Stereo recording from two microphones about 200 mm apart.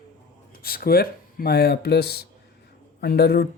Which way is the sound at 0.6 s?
50° left (ahead or behind).